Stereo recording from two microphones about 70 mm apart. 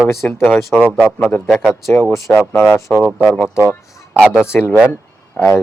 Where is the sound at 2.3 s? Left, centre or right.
Centre.